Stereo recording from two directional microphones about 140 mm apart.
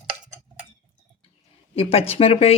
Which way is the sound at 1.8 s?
45° left (ahead or behind).